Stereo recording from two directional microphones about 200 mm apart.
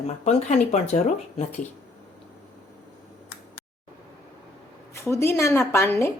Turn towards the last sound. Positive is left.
turn(degrees=15)  # may be behind; listen again after turning